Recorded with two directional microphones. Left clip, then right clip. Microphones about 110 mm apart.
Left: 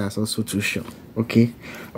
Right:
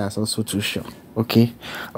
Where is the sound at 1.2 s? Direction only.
20° left (ahead or behind).